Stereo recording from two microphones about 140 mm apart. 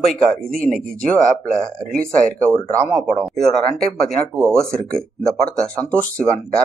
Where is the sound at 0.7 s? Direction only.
75° right (ahead or behind).